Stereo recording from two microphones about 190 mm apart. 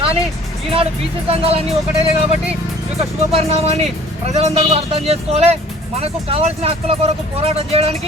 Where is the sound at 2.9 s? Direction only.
35° right (ahead or behind).